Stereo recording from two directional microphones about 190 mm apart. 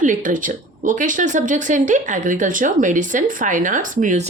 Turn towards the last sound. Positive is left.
turn(degrees=-40)  # may be behind; listen again after turning